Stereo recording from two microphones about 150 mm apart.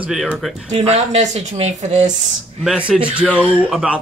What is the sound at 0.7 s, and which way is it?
Speech, 45° right (ahead or behind).